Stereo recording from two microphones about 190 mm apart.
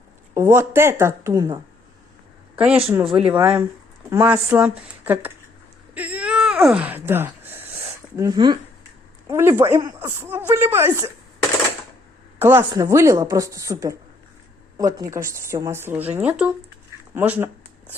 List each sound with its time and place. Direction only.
0.3 s speech: 15° right (ahead or behind)
2.6 s speech: 5° right (ahead or behind)
5.9 s wail: 5° right (ahead or behind)
9.3 s speech: 15° right (ahead or behind)
12.4 s speech: 10° right (ahead or behind)